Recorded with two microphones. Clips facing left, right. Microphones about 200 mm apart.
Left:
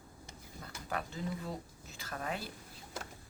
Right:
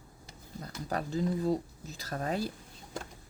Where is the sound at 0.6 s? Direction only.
40° right (ahead or behind).